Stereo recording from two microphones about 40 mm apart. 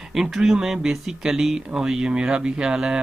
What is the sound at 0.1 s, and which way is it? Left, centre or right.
Speech, centre.